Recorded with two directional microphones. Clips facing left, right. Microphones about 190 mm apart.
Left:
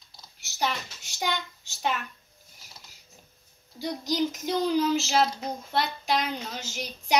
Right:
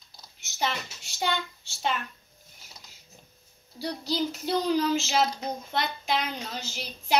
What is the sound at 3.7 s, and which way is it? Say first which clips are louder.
Child singing: left 1 dB; 15° left (ahead or behind).